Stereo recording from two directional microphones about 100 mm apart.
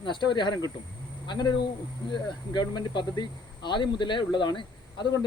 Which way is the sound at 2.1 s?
50° left (ahead or behind).